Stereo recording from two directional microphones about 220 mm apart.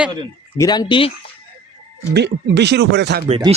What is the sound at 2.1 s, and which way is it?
Speech, 50° right (ahead or behind).